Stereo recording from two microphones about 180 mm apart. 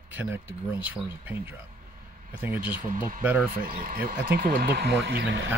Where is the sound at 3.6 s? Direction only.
50° right (ahead or behind); by 5.5 s 75° right (ahead or behind).